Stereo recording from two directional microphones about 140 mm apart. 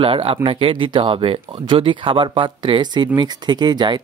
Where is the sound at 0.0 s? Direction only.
40° right (ahead or behind).